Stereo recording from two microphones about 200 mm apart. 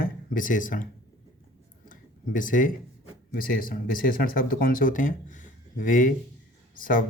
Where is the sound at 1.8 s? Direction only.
40° left (ahead or behind).